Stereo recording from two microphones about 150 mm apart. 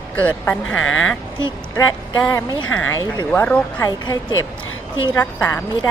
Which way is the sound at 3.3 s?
10° left (ahead or behind).